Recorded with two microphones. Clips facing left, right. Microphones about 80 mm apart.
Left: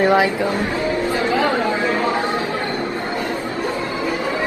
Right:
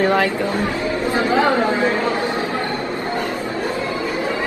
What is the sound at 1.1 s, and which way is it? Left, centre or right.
Speech, right.